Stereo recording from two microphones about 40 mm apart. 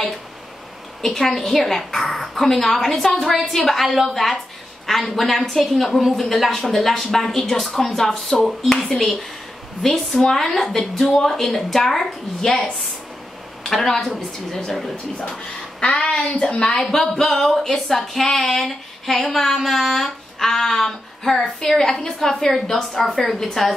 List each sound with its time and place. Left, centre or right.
1.0 s a woman's voice: centre
8.7 s a woman's voice: centre
13.7 s speech: centre
15.8 s a woman's voice: left
16.8 s a woman's voice: centre
18.3 s speech: centre
18.6 s a sound: centre
19.3 s a woman's voice: centre